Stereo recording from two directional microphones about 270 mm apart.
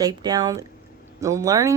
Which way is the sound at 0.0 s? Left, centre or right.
Centre.